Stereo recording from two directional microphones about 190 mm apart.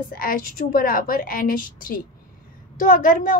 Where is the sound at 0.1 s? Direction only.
50° left (ahead or behind).